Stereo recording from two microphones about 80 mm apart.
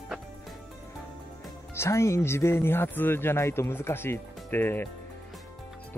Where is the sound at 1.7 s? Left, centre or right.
Left.